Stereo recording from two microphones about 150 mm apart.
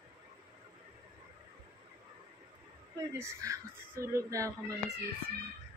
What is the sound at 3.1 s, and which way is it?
Speech, 20° right (ahead or behind).